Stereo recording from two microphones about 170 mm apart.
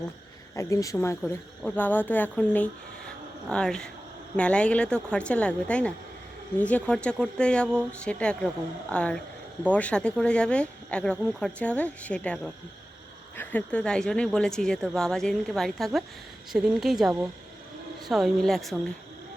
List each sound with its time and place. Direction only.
0.5 s a woman's voice: 20° left (ahead or behind); by 18.8 s centre (ahead or behind)